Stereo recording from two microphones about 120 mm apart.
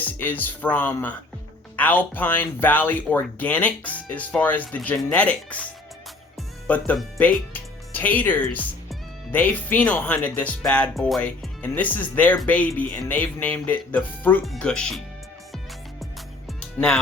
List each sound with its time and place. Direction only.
0.0 s speech: 15° left (ahead or behind)
6.7 s speech: 15° left (ahead or behind)
14.4 s speech: centre (ahead or behind)